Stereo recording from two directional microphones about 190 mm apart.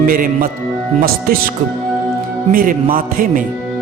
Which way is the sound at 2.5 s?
50° right (ahead or behind).